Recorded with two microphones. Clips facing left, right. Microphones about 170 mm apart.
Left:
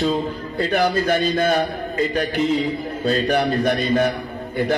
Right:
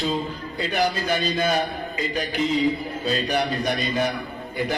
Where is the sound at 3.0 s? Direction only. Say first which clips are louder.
Left 5 dB; 55° left (ahead or behind).